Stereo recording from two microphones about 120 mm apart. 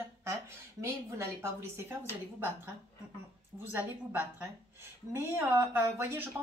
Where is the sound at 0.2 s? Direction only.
25° right (ahead or behind).